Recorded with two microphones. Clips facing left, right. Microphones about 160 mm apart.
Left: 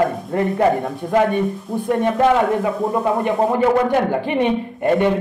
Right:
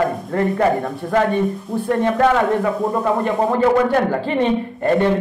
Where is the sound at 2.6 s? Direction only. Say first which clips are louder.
Even; 15° left (ahead or behind).